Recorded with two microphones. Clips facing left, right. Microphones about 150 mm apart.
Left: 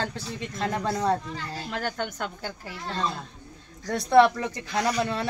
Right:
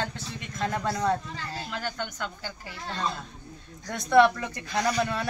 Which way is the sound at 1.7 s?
50° left (ahead or behind).